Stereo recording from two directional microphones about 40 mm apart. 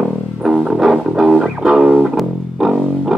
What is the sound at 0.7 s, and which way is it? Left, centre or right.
Music, centre.